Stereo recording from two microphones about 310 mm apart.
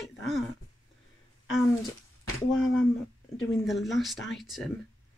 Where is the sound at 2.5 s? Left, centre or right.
Left.